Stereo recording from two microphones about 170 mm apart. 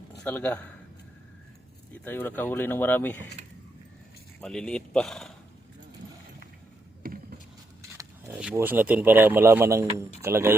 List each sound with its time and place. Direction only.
0.3 s speech: 10° left (ahead or behind)
2.0 s speech: 10° left (ahead or behind)
4.4 s speech: 5° left (ahead or behind)
7.0 s a sound: 60° right (ahead or behind)
7.8 s a sound: 20° right (ahead or behind)
8.5 s speech: 10° right (ahead or behind)